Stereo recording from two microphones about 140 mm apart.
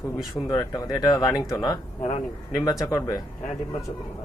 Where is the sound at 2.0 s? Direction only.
55° left (ahead or behind).